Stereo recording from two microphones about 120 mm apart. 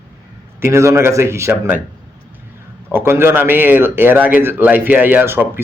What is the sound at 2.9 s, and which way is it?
A man's voice, 20° right (ahead or behind).